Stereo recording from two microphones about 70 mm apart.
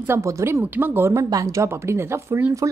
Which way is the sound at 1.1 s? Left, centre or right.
Right.